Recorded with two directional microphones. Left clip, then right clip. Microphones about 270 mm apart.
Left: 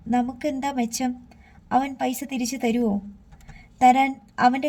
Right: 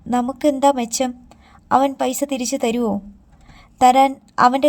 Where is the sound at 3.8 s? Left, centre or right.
Right.